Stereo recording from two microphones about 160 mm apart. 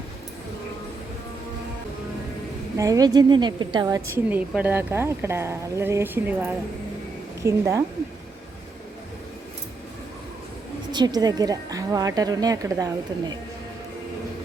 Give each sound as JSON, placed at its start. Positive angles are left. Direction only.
{"t": 2.7, "sound": "a woman's voice", "side_deg": -20}
{"t": 4.3, "sound": "speech", "side_deg": -10}
{"t": 10.9, "sound": "a woman's voice", "side_deg": -25}